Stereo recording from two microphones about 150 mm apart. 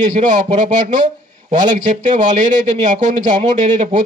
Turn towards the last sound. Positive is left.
turn(degrees=-50)  # may be behind; listen again after turning